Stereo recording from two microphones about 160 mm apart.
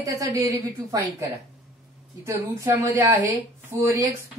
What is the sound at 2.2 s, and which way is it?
A woman's voice, 20° right (ahead or behind).